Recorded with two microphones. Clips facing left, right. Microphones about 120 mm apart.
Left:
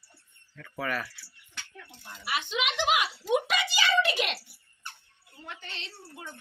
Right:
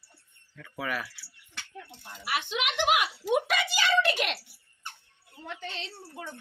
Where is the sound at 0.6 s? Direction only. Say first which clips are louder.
Left 1 dB; 10° right (ahead or behind).